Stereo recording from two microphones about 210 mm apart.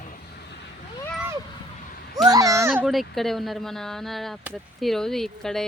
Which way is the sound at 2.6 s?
10° right (ahead or behind).